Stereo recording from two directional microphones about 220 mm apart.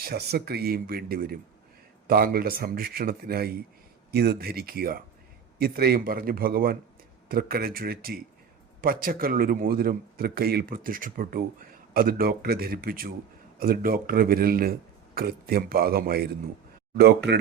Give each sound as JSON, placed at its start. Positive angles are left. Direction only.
{"t": 0.0, "sound": "a man's voice", "side_deg": -45}